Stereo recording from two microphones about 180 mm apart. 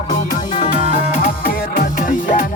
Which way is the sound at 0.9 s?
50° left (ahead or behind).